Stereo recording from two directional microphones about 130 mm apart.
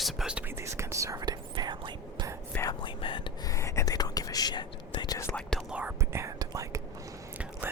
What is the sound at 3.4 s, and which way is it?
Whispering, 25° left (ahead or behind).